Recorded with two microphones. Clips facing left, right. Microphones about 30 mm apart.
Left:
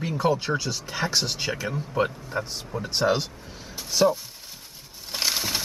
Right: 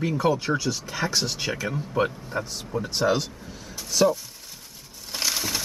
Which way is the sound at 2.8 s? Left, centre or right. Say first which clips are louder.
Even; centre.